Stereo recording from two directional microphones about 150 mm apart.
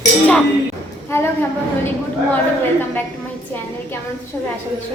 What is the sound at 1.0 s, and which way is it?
Speech, 15° left (ahead or behind).